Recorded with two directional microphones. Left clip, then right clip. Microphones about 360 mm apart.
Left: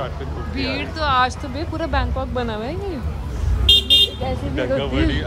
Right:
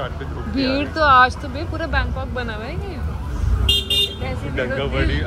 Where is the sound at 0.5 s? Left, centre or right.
Centre.